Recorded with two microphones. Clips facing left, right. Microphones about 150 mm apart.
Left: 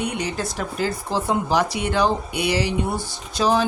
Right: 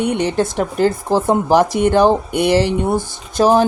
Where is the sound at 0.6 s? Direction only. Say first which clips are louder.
Right 7 dB; 55° right (ahead or behind).